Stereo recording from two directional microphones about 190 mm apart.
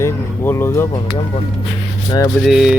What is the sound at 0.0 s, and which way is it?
Speech, 15° left (ahead or behind).